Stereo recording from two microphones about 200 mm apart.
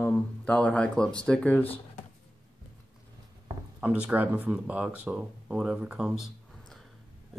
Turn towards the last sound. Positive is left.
turn(degrees=-5)  # may be behind; listen again after turning